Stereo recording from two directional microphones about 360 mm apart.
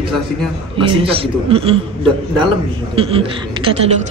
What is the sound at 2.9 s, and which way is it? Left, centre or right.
Speech, centre.